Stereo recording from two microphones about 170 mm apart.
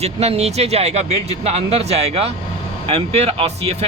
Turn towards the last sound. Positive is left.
turn(degrees=-40)  # may be behind; listen again after turning